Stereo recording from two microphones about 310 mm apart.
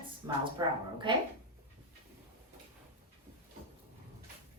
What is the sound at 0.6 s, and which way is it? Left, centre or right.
Speech, centre.